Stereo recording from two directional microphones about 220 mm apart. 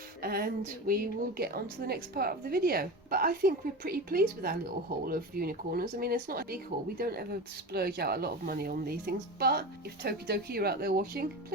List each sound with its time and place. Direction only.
0.2 s a woman's voice: 40° right (ahead or behind)